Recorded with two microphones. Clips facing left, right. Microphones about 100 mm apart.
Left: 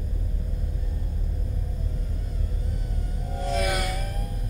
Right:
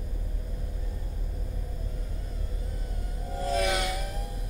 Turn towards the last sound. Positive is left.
turn(degrees=-20)  # may be behind; listen again after turning